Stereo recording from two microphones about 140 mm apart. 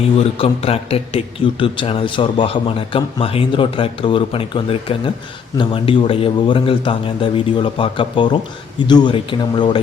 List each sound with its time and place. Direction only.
0.2 s a man's voice: 45° left (ahead or behind)